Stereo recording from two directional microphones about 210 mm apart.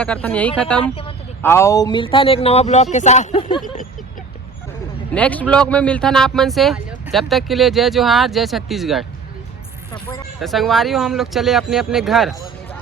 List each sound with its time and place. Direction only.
0.0 s speech: 5° left (ahead or behind)
0.8 s speech: 25° left (ahead or behind)
1.4 s speech: 10° left (ahead or behind); by 3.6 s 30° left (ahead or behind)
5.1 s a man's voice: 5° left (ahead or behind)
9.9 s speech: 15° left (ahead or behind)
10.4 s a man's voice: centre (ahead or behind)